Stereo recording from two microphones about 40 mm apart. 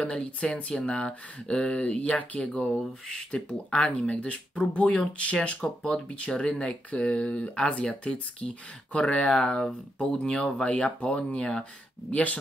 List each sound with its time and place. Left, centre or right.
0.0 s speech: left
9.3 s speech: centre
10.7 s speech: left
12.1 s speech: left